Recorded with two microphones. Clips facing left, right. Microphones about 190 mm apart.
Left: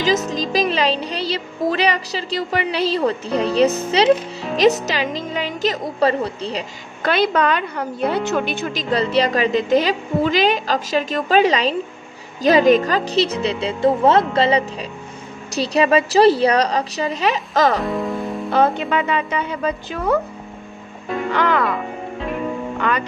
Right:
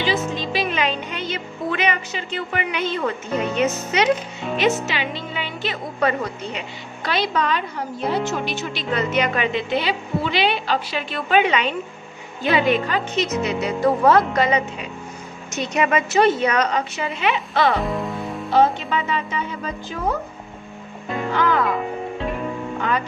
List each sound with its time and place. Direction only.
0.0 s speech: 40° left (ahead or behind)
7.0 s a woman's voice: 55° left (ahead or behind)
8.9 s speech: 35° left (ahead or behind)
17.7 s music: centre (ahead or behind)
18.5 s a woman's voice: 55° left (ahead or behind)
21.4 s speech: 75° left (ahead or behind)
22.8 s speech: 75° left (ahead or behind)